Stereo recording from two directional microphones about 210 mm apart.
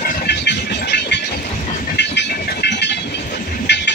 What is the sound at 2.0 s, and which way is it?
Train, 55° left (ahead or behind).